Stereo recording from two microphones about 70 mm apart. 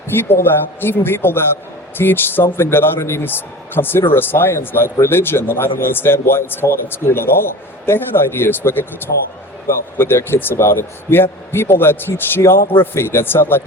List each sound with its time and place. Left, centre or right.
0.8 s a man's voice: left